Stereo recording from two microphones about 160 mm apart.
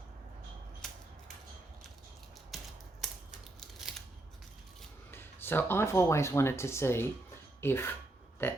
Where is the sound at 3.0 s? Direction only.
Centre (ahead or behind).